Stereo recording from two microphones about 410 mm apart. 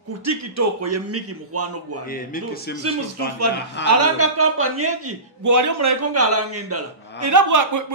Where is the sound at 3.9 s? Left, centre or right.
Right.